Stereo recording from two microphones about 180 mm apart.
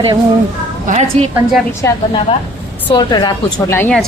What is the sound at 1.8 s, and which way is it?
A woman's voice, 15° left (ahead or behind).